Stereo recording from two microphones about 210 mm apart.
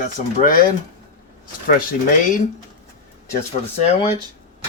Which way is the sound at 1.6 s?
40° left (ahead or behind).